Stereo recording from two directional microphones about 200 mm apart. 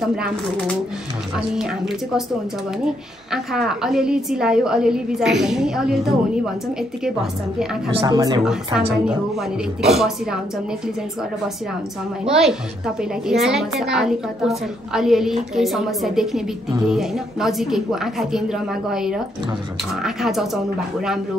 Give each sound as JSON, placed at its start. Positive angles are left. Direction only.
{"t": 0.0, "sound": "a woman's voice", "side_deg": 0}
{"t": 3.3, "sound": "a woman's voice", "side_deg": 0}
{"t": 7.9, "sound": "speech", "side_deg": -25}
{"t": 9.0, "sound": "a woman's voice", "side_deg": 0}
{"t": 12.3, "sound": "a woman's voice", "side_deg": 0}